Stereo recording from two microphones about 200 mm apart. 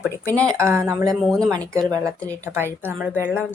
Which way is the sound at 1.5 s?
15° right (ahead or behind).